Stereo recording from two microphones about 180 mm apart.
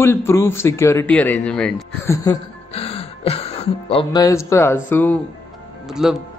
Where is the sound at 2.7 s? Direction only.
35° left (ahead or behind); by 5.2 s 10° left (ahead or behind).